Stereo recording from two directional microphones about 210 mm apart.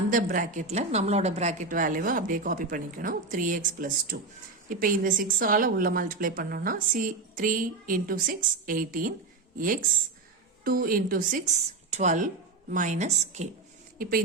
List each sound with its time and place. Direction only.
0.1 s a woman's voice: 40° right (ahead or behind)